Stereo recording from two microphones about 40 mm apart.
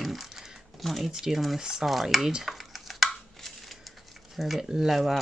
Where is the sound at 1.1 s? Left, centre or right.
Centre.